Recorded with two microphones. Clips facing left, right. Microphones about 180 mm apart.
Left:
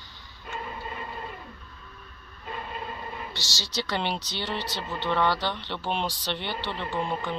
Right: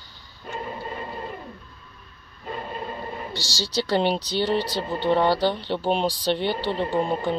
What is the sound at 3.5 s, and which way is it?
Speech, 35° right (ahead or behind).